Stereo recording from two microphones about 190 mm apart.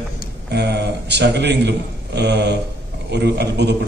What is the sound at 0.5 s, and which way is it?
A man's voice, 60° right (ahead or behind).